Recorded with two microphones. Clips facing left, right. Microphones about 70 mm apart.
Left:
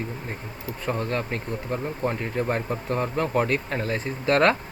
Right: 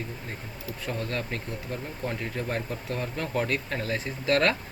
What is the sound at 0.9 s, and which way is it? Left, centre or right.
Speech, left.